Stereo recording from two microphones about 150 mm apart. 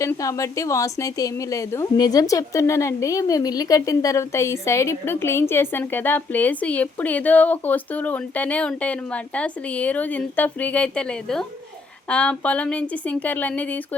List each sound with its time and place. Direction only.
0.0 s a woman's voice: 20° left (ahead or behind)